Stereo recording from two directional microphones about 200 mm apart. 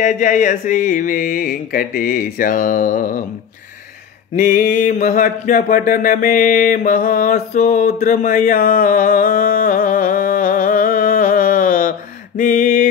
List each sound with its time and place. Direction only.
0.0 s mantra: 40° left (ahead or behind)
4.4 s music: 40° left (ahead or behind)
12.4 s mantra: 40° left (ahead or behind)